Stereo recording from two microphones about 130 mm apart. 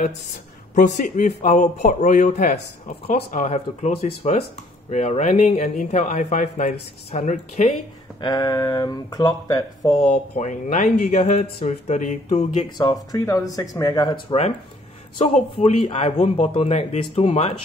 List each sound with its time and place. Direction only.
0.7 s speech: 80° left; by 7.7 s 65° left (ahead or behind)
8.2 s speech: 30° left (ahead or behind)
10.0 s speech: 70° left (ahead or behind)
12.6 s speech: 30° left (ahead or behind)
15.1 s speech: 60° left (ahead or behind)